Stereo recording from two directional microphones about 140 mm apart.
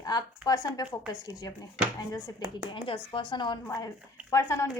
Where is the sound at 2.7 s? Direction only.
40° left (ahead or behind).